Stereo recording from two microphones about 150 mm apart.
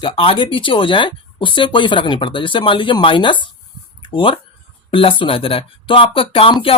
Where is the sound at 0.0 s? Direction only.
35° left (ahead or behind).